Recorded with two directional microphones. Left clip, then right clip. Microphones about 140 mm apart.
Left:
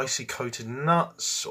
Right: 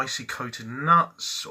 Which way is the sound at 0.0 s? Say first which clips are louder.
Even; 25° left (ahead or behind).